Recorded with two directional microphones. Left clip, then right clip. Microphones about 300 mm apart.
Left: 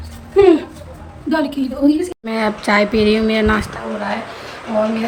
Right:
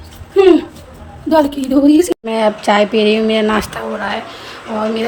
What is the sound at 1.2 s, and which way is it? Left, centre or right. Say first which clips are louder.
Speech: right 6 dB; centre.